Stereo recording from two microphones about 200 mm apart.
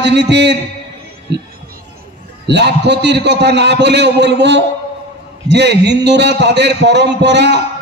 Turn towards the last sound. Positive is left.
turn(degrees=-60)  # may be behind; listen again after turning